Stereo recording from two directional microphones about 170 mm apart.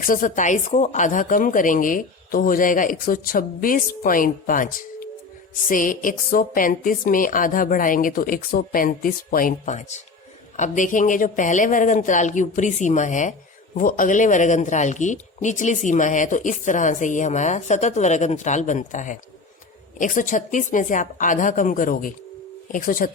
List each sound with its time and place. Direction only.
0.0 s a woman's voice: 50° left (ahead or behind)